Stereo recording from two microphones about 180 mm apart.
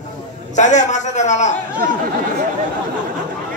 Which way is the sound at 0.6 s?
40° left (ahead or behind).